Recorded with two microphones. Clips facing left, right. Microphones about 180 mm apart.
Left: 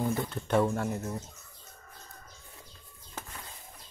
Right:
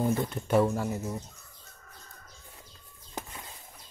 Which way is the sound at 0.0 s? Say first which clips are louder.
Right 3 dB; 15° right (ahead or behind).